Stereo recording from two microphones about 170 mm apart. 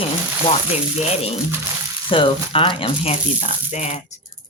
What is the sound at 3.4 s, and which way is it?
Speech, 45° left (ahead or behind).